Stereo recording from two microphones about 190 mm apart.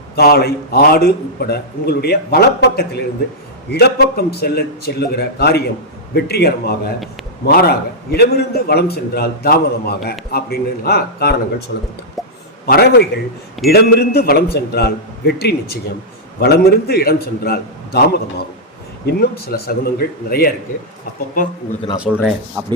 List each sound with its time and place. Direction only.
0.2 s a man's voice: 55° left (ahead or behind)
12.2 s a sound: centre (ahead or behind)
12.6 s a man's voice: 55° left (ahead or behind)
21.9 s a man's voice: 5° right (ahead or behind)